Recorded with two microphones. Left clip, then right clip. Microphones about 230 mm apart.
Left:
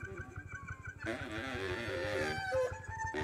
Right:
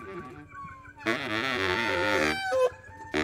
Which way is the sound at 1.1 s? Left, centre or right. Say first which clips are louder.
Right 13 dB; right.